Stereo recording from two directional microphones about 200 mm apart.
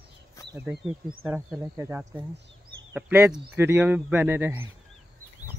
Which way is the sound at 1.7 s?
15° right (ahead or behind).